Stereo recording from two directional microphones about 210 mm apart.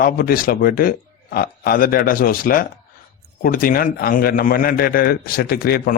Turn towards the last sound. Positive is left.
turn(degrees=45)  # may be behind; listen again after turning